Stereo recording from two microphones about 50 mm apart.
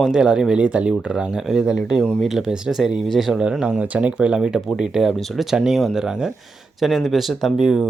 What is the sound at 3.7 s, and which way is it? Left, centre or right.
Speech, right.